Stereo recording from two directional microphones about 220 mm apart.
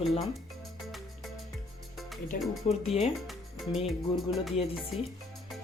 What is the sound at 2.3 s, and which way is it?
Speech, 40° left (ahead or behind).